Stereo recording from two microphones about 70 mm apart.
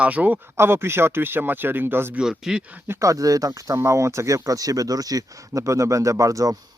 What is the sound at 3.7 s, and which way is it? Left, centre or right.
Speech, right.